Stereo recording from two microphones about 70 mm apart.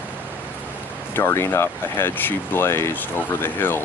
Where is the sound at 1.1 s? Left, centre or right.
Left.